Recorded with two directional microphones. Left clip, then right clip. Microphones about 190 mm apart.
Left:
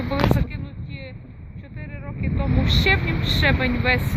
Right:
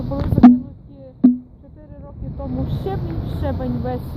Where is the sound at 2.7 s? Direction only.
25° left (ahead or behind).